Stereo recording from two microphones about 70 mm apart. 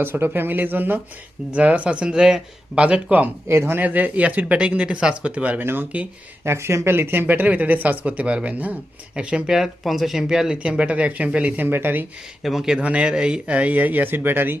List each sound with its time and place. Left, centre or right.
0.0 s speech: right
3.5 s speech: right
3.8 s speech: right
6.4 s speech: right; by 9.6 s centre
9.6 s speech: centre; by 12.0 s right
12.4 s speech: centre
12.8 s speech: centre